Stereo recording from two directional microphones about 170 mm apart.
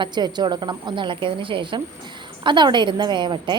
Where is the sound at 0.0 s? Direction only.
25° right (ahead or behind).